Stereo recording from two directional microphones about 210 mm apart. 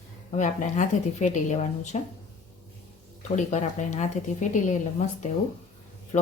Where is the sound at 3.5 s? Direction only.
35° left (ahead or behind).